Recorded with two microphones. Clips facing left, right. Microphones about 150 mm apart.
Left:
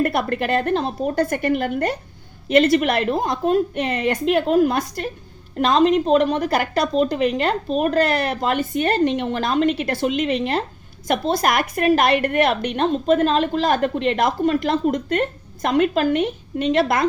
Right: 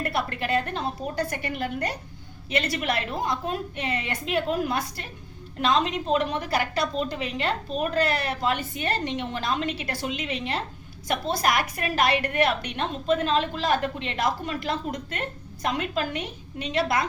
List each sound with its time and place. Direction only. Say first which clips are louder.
0.0 s a woman's voice: left 8 dB; 50° left (ahead or behind)